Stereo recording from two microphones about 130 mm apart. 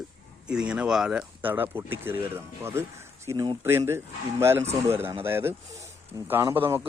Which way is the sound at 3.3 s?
30° right (ahead or behind).